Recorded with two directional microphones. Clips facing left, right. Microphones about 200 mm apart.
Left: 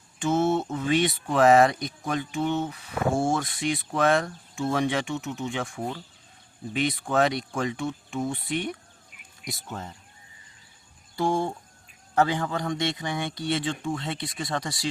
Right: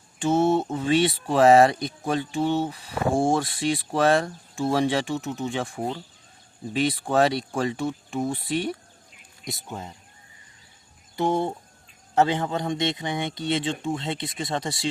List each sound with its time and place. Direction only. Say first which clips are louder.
0.2 s speech: right 3 dB; 30° right (ahead or behind)
9.6 s speech: even; 15° right (ahead or behind)
11.2 s speech: right 2 dB; 20° right (ahead or behind)